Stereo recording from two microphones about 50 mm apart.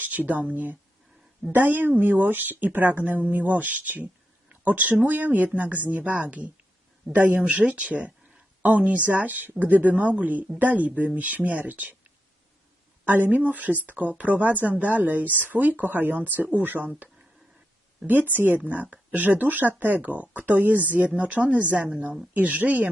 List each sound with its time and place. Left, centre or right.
0.0 s speech: right
18.0 s speech: right